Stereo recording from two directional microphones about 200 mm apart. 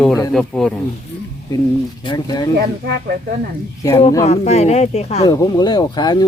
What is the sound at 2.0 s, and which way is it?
Speech, 20° left (ahead or behind).